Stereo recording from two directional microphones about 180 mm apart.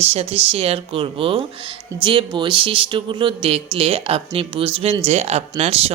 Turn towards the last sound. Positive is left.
turn(degrees=-35)  # may be behind; listen again after turning